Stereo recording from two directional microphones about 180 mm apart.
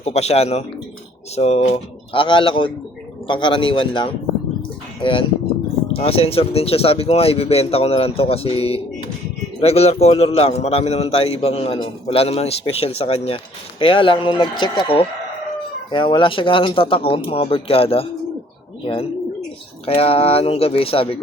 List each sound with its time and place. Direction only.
0.0 s a man's voice: 35° left (ahead or behind)
19.8 s a man's voice: 30° left (ahead or behind)